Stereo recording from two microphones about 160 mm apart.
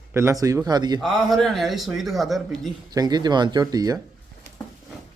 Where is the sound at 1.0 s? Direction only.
Centre (ahead or behind).